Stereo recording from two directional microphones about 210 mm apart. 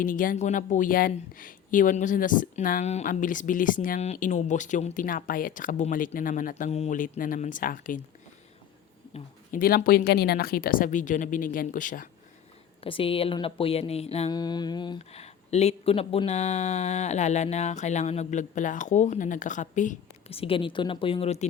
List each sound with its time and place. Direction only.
0.0 s speech: 40° left (ahead or behind)
9.1 s speech: 40° left (ahead or behind)
12.8 s speech: 25° left (ahead or behind)